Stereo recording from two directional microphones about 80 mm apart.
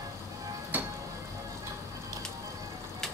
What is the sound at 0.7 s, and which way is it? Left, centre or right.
Music, right.